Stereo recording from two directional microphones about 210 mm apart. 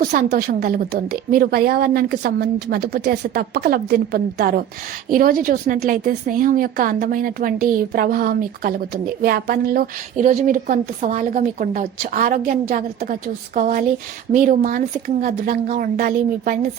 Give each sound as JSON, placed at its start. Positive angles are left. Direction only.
{"t": 0.0, "sound": "a woman's voice", "side_deg": -50}